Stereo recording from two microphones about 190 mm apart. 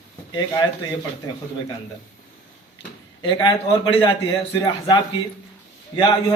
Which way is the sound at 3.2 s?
25° left (ahead or behind).